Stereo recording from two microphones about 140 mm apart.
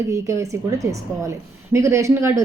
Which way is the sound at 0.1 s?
25° right (ahead or behind).